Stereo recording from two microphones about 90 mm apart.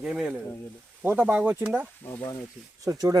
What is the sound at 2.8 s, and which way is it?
Speech, 35° right (ahead or behind).